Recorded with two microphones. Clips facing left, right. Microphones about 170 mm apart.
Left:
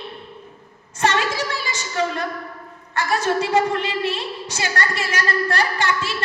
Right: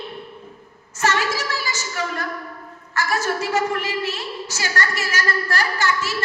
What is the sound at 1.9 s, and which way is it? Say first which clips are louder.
A woman's voice: left 6 dB; 30° left (ahead or behind).